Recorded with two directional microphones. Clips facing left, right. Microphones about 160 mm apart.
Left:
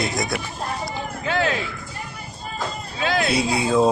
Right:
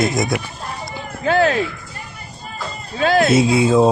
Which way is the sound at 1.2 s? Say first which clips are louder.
Right 7 dB; 40° right (ahead or behind).